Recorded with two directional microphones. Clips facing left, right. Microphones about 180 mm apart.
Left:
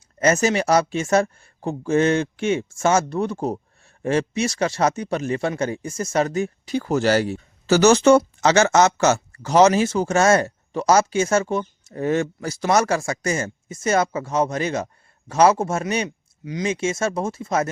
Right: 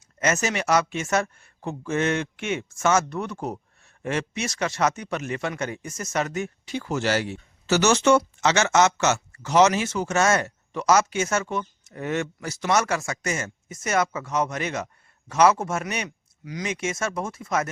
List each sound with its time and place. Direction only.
0.2 s speech: 35° left (ahead or behind)